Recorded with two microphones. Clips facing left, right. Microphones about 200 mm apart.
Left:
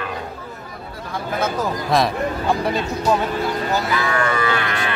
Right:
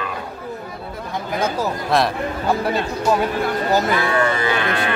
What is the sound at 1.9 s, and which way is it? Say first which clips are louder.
Speech: even; centre (ahead or behind).